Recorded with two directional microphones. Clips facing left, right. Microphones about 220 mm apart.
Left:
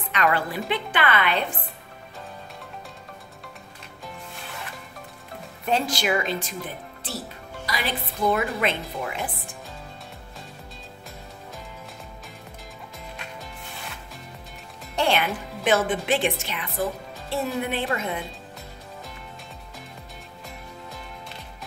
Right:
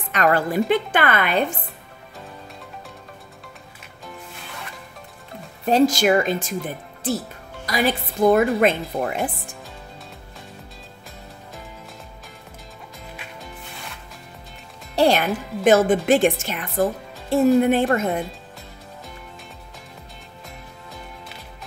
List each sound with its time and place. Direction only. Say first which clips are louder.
0.1 s a woman's voice: right 5 dB; 45° right (ahead or behind)
5.7 s a woman's voice: right 8 dB; 40° right (ahead or behind)
7.6 s a woman's voice: right 8 dB; 45° right (ahead or behind)
15.0 s a woman's voice: right 6 dB; 40° right (ahead or behind)